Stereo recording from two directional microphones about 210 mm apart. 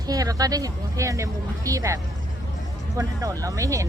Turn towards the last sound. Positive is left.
turn(degrees=-15)  # may be behind; listen again after turning